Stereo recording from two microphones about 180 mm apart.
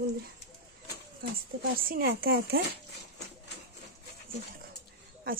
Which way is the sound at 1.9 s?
55° right (ahead or behind).